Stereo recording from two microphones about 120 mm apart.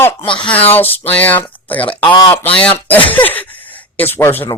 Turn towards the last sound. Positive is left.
turn(degrees=20)  # may be behind; listen again after turning